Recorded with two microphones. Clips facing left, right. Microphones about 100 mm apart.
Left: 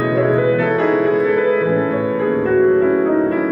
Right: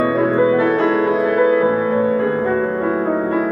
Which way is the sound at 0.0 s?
30° right (ahead or behind).